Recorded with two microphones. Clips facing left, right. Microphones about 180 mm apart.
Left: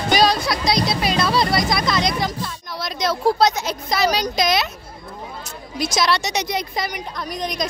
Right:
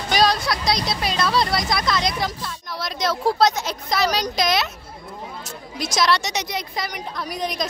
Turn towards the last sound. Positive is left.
turn(degrees=-5)  # may be behind; listen again after turning